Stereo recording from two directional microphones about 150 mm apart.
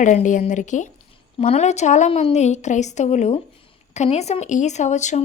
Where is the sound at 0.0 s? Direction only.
55° left (ahead or behind).